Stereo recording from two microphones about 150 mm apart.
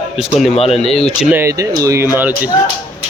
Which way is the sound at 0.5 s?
40° left (ahead or behind).